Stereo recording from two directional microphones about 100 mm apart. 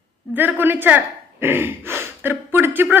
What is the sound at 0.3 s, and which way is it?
Speech, 20° right (ahead or behind).